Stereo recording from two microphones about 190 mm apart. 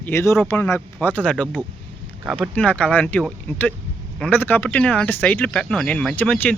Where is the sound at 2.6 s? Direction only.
5° left (ahead or behind).